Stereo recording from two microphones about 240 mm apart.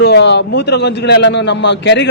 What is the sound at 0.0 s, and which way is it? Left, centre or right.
A man's voice, left.